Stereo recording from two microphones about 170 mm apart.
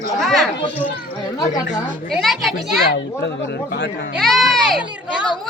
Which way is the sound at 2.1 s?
Centre (ahead or behind).